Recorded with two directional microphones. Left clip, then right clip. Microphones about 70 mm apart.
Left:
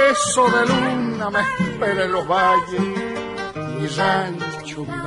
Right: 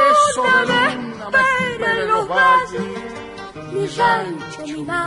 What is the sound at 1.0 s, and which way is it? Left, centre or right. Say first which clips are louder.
Speech: right 4 dB; right.